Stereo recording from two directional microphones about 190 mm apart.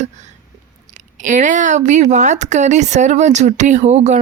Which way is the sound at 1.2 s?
40° right (ahead or behind).